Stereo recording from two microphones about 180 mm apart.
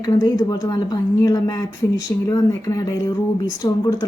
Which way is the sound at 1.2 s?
20° left (ahead or behind).